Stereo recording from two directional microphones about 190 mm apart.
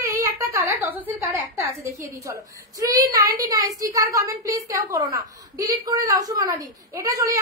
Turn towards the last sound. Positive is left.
turn(degrees=-15)  # may be behind; listen again after turning